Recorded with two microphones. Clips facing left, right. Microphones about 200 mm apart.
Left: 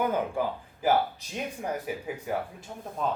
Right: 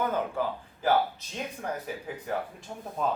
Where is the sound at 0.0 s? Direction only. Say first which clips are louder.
Left 1 dB; 15° left (ahead or behind).